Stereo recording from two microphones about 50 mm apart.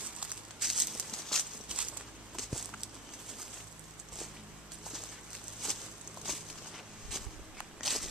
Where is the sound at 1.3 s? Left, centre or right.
Centre.